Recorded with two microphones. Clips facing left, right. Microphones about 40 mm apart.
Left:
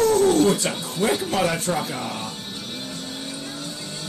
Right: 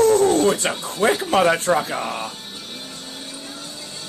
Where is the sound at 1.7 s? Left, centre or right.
Right.